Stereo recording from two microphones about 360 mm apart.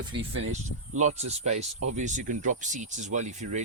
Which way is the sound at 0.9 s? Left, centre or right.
Centre.